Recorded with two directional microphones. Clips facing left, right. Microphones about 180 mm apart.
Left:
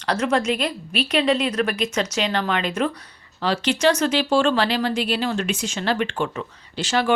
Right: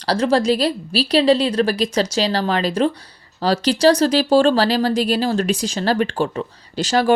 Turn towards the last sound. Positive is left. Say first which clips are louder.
# right 4 dB
turn(degrees=-40)  # may be behind; listen again after turning